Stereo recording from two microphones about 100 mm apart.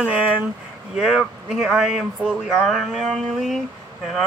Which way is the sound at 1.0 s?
5° right (ahead or behind).